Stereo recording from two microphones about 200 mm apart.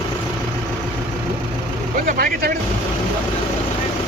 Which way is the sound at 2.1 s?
45° right (ahead or behind).